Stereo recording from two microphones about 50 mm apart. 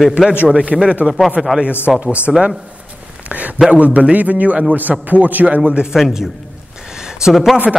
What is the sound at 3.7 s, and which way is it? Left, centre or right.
A man's voice, right.